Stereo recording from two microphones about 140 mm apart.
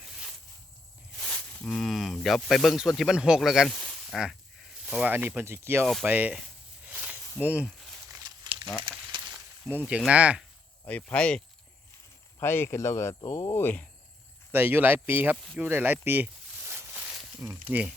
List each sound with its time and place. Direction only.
0.0 s a sound: centre (ahead or behind)
1.2 s speech: 10° left (ahead or behind); by 5.8 s 15° right (ahead or behind)
5.8 s speech: centre (ahead or behind)
6.1 s speech: 10° right (ahead or behind)
6.8 s snake: 10° right (ahead or behind)
8.4 s a sound: 30° right (ahead or behind)
9.2 s snake: 10° right (ahead or behind)
10.1 s speech: 10° right (ahead or behind)
10.8 s speech: 10° left (ahead or behind)
14.5 s speech: 15° right (ahead or behind)